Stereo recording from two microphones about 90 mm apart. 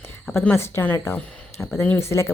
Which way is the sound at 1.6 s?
10° left (ahead or behind).